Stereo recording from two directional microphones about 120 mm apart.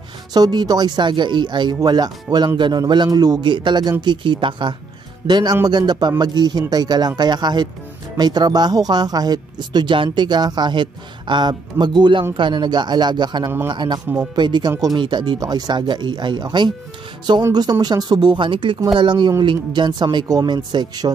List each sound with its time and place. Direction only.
0.3 s speech: 35° right (ahead or behind)